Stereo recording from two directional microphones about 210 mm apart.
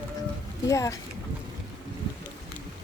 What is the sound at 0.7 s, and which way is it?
Speech, 15° left (ahead or behind).